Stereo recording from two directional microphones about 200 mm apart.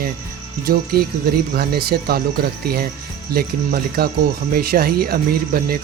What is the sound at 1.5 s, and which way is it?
Speech, 50° right (ahead or behind).